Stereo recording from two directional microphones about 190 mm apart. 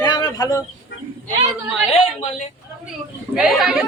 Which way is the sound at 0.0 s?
20° left (ahead or behind).